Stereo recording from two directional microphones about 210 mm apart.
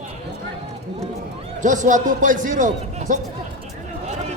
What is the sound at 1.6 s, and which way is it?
A man's voice, 35° right (ahead or behind).